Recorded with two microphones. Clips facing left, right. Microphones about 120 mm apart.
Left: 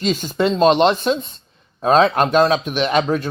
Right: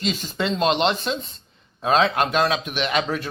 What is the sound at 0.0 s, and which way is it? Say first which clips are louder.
Speech: left 7 dB; 40° left (ahead or behind).